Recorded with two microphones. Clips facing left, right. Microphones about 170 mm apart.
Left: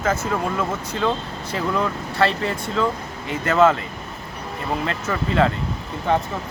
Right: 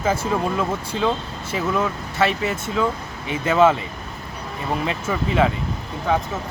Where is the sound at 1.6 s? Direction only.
10° right (ahead or behind).